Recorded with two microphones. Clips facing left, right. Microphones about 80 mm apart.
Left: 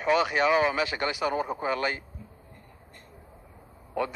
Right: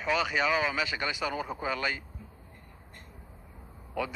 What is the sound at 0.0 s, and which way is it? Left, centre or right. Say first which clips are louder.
A man's voice: left 5 dB; left.